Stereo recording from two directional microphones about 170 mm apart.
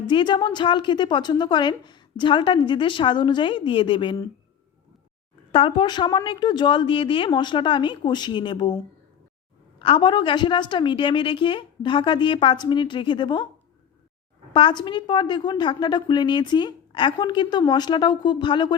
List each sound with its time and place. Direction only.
0.1 s a woman's voice: 25° left (ahead or behind)
5.5 s a woman's voice: 30° left (ahead or behind)
14.5 s a woman's voice: 25° left (ahead or behind)